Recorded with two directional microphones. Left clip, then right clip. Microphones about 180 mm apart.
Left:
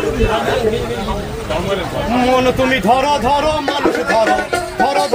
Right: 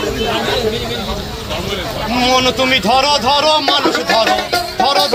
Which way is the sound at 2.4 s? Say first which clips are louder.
Right 1 dB; 20° left (ahead or behind).